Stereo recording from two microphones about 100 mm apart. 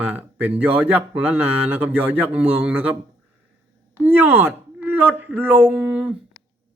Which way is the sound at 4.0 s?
20° right (ahead or behind).